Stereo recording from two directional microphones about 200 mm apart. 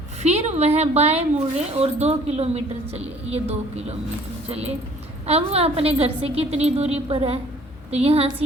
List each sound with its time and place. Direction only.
0.2 s a woman's voice: 35° right (ahead or behind)